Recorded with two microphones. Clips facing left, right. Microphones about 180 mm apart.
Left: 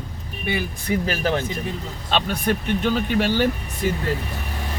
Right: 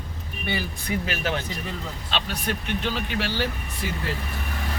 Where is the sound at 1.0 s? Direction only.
40° left (ahead or behind).